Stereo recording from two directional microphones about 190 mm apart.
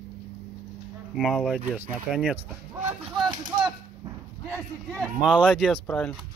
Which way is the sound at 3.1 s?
25° right (ahead or behind).